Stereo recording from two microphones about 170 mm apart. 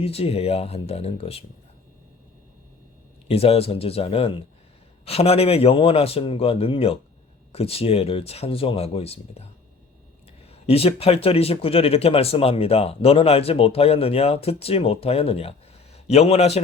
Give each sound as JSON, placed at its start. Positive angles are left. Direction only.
{"t": 0.0, "sound": "speech", "side_deg": 35}
{"t": 3.2, "sound": "speech", "side_deg": 35}
{"t": 10.7, "sound": "speech", "side_deg": 35}